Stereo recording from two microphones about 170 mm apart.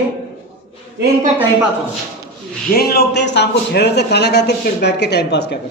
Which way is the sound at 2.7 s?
65° left (ahead or behind).